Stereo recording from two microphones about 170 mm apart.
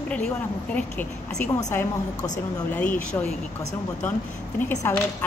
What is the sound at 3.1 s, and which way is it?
Speech, 15° left (ahead or behind).